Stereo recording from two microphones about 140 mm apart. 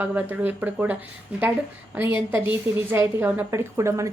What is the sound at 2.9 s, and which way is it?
A woman's voice, 15° right (ahead or behind).